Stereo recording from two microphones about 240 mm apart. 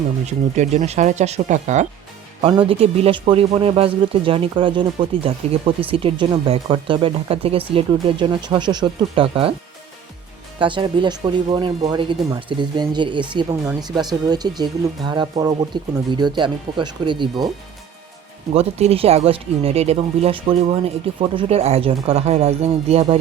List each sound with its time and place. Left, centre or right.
0.3 s speech: right
10.6 s speech: centre
18.5 s speech: right